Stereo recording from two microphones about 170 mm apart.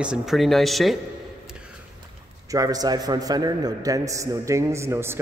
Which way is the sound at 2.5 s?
20° right (ahead or behind).